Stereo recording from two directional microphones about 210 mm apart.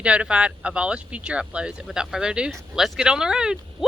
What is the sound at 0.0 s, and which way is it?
Speech, 5° right (ahead or behind).